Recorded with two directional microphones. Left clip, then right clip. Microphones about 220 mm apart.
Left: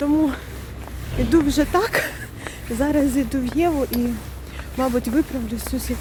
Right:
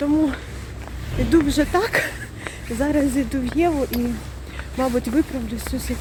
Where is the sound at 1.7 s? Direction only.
10° left (ahead or behind).